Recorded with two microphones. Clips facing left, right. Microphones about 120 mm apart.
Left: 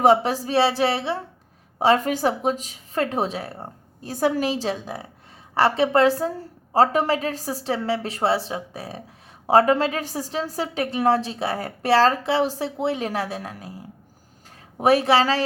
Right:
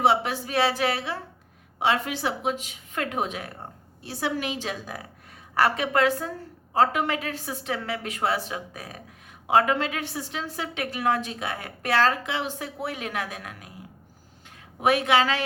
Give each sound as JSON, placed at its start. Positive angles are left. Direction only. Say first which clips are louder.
{"t": 0.0, "sound": "a woman's voice", "louder": "left 5 dB", "side_deg": 40}
{"t": 1.8, "sound": "a woman's voice", "louder": "left 6 dB", "side_deg": 40}